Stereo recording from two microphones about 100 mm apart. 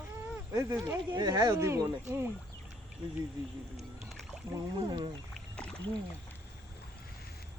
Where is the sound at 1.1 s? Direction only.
40° right (ahead or behind).